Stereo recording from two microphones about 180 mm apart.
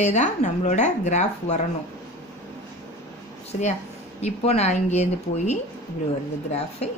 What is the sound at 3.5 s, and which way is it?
Speech, 40° left (ahead or behind).